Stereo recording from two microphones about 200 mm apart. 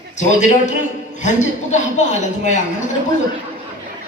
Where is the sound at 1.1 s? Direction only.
35° left (ahead or behind).